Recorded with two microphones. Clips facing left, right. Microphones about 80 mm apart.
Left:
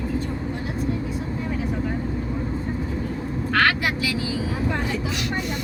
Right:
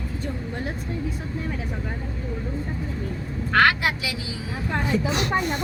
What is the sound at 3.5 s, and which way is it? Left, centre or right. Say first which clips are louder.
Vehicle: right 2 dB; right.